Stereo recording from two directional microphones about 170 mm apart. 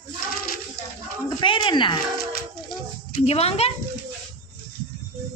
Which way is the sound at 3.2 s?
35° left (ahead or behind).